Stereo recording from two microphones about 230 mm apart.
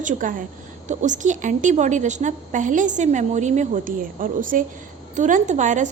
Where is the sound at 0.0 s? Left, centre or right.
Right.